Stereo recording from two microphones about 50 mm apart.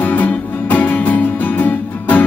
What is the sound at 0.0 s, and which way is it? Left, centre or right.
Music, left.